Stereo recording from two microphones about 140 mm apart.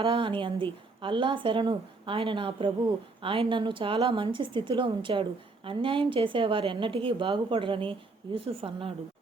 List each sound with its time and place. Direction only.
0.0 s a woman's voice: 40° right (ahead or behind)